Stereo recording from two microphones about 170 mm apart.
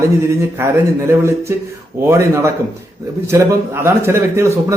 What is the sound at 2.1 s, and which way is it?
A man's voice, 15° right (ahead or behind).